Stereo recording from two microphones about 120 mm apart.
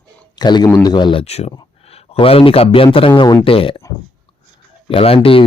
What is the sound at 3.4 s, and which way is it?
Speech, 50° left (ahead or behind).